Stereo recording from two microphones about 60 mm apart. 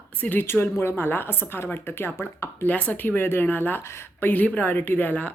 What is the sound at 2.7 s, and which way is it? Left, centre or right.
Speech, left.